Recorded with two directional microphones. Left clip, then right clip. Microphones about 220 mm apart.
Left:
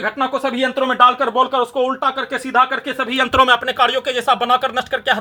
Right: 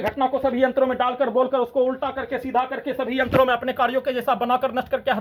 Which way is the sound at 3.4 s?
25° left (ahead or behind).